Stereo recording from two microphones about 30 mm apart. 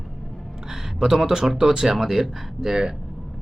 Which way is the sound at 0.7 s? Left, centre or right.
Centre.